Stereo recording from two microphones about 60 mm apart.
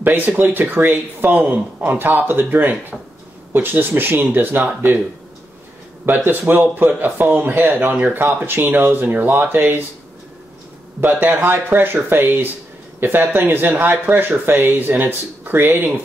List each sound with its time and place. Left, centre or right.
0.0 s speech: right
6.0 s speech: right
11.0 s speech: right